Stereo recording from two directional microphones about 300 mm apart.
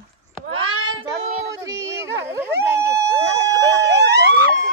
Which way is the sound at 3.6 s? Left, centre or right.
Right.